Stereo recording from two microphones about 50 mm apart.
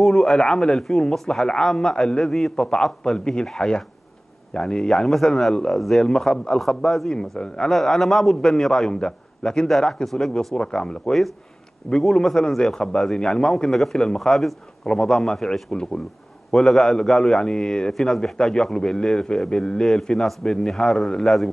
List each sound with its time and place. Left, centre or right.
0.0 s a man's voice: centre
7.7 s a man's voice: centre
9.0 s a man's voice: centre
9.7 s a man's voice: centre
16.5 s a man's voice: centre